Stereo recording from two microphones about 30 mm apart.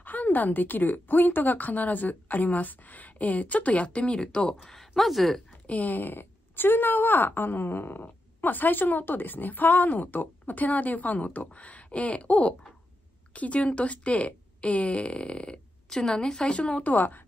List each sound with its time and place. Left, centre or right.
0.0 s a woman's voice: left
4.6 s speech: centre
5.7 s a woman's voice: left
15.9 s a woman's voice: left
16.8 s speech: left